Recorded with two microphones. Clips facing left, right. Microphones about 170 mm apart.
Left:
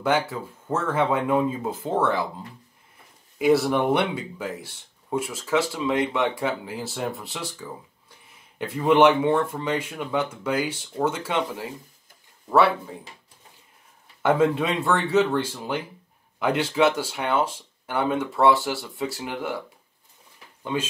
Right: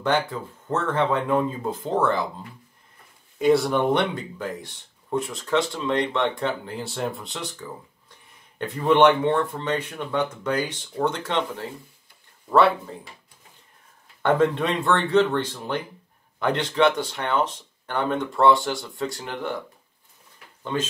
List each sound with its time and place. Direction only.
0.0 s speech: 10° left (ahead or behind)
3.3 s speech: 5° left (ahead or behind)
14.2 s speech: 5° left (ahead or behind)